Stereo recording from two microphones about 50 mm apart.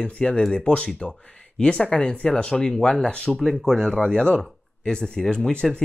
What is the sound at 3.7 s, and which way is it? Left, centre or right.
Speech, centre.